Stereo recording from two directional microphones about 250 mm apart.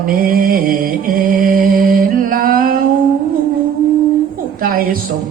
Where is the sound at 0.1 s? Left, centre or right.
Right.